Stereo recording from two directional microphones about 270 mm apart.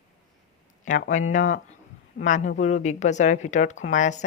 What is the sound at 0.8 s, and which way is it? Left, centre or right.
Speech, left.